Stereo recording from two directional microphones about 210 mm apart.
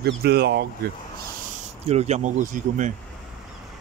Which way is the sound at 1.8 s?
30° right (ahead or behind).